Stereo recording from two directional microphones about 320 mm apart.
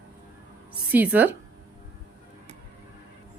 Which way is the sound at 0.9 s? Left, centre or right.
Centre.